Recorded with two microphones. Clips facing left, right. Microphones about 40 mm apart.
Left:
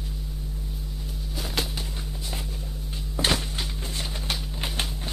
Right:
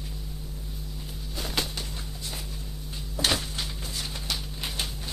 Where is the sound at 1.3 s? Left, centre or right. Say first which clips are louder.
Left 1 dB; centre.